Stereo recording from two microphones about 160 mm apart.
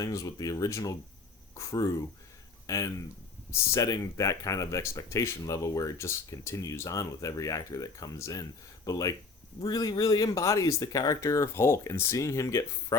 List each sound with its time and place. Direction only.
0.0 s speech: 20° left (ahead or behind)